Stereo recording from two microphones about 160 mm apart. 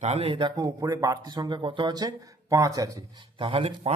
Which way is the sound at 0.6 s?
20° right (ahead or behind).